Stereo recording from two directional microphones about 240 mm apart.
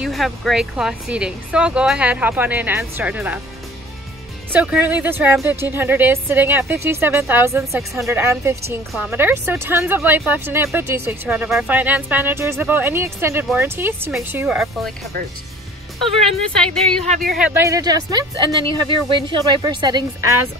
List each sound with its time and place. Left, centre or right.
0.0 s speech: centre
4.5 s speech: centre
16.3 s speech: centre
17.0 s speech: right
17.4 s speech: centre